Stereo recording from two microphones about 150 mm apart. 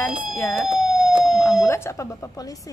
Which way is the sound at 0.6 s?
5° right (ahead or behind).